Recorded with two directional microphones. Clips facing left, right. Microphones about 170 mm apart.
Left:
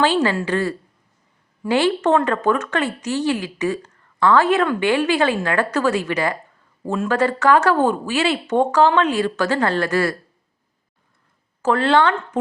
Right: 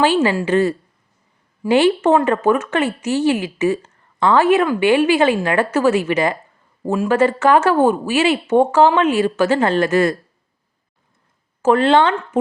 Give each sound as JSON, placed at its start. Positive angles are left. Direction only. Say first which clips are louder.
{"t": 0.0, "sound": "a woman's voice", "louder": "right 2 dB", "side_deg": -15}
{"t": 4.6, "sound": "speech", "louder": "right 3 dB", "side_deg": -5}
{"t": 4.9, "sound": "a woman's voice", "louder": "right 6 dB", "side_deg": -20}
{"t": 11.6, "sound": "a woman's voice", "louder": "right 3 dB", "side_deg": -20}